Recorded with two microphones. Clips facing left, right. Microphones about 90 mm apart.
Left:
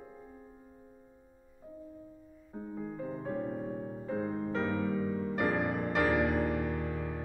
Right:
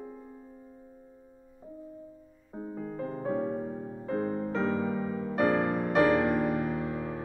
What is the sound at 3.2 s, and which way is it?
Music, 45° right (ahead or behind).